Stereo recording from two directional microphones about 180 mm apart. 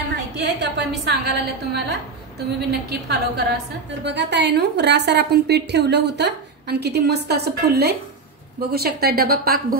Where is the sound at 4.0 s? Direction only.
75° right (ahead or behind).